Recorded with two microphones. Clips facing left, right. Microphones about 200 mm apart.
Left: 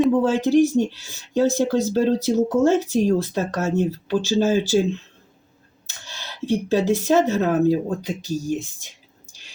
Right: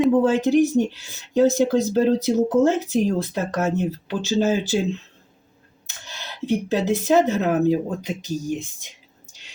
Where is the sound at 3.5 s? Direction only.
20° right (ahead or behind).